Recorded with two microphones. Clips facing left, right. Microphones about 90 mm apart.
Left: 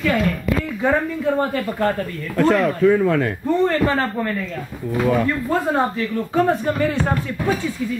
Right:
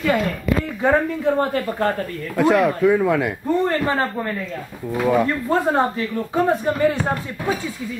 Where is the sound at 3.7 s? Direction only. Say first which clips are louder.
Left 1 dB; 25° right (ahead or behind).